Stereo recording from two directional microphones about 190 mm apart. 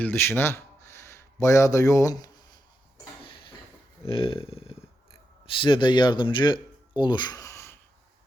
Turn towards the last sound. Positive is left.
turn(degrees=15)  # may be behind; listen again after turning